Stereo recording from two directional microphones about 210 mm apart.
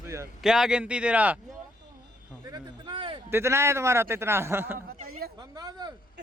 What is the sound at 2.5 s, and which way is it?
Speech, 20° right (ahead or behind).